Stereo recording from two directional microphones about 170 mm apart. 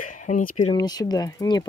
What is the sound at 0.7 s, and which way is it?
Speech, 25° left (ahead or behind).